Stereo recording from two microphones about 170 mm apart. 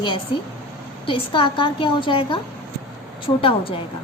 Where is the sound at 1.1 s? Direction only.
30° left (ahead or behind).